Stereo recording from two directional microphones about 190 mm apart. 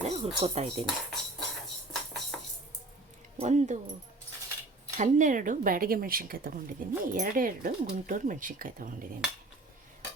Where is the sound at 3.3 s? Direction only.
40° right (ahead or behind).